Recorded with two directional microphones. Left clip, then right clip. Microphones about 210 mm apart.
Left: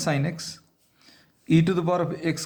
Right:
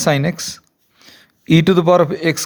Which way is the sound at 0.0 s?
40° right (ahead or behind).